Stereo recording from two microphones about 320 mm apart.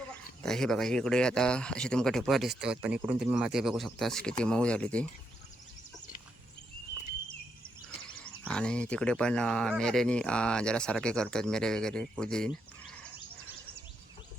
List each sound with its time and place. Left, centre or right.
0.1 s speech: centre
7.9 s speech: centre